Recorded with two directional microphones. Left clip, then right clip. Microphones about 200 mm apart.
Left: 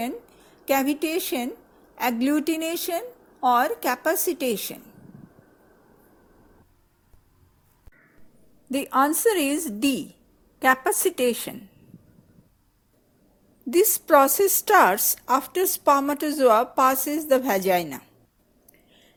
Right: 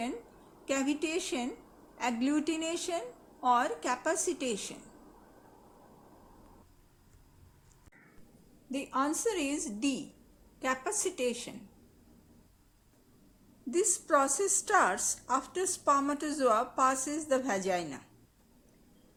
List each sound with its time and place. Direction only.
0.6 s a woman's voice: 35° left (ahead or behind)
8.7 s a woman's voice: 40° left (ahead or behind)
13.7 s a woman's voice: 35° left (ahead or behind)